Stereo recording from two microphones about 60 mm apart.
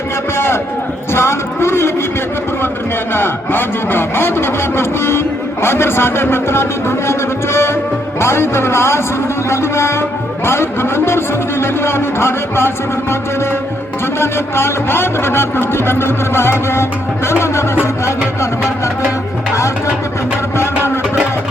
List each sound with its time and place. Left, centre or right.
0.3 s a man's voice: left
3.1 s speech: left
14.2 s speech: left
20.6 s speech: left